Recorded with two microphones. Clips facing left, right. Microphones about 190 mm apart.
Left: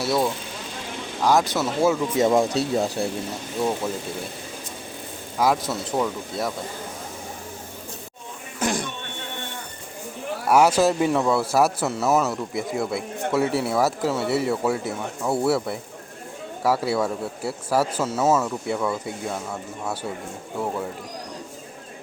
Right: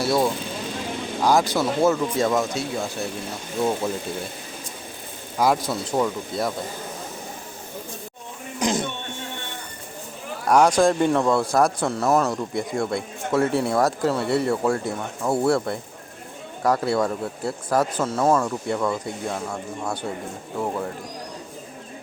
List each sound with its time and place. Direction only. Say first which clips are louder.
0.0 s speech: right 2 dB; centre (ahead or behind)
2.1 s speech: left 3 dB; 25° left (ahead or behind)
5.4 s speech: right 1 dB; centre (ahead or behind)
8.5 s a sound: right 2 dB; 20° right (ahead or behind)
10.5 s speech: right 1 dB; 5° left (ahead or behind)